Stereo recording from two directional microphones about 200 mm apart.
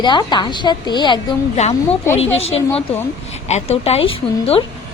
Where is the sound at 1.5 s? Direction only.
35° left (ahead or behind).